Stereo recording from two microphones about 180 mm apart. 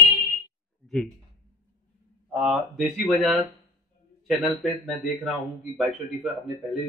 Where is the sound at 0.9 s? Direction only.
5° left (ahead or behind).